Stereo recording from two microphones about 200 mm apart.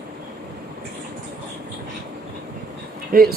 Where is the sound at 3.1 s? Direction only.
45° right (ahead or behind).